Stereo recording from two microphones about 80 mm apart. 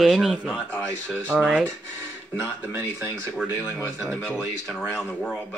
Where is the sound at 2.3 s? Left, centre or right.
Right.